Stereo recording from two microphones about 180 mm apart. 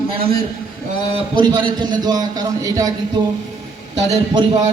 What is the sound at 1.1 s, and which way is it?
A man's voice, 25° right (ahead or behind).